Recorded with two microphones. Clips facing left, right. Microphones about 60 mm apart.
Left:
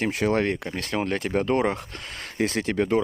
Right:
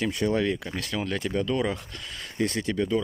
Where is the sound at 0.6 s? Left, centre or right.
Left.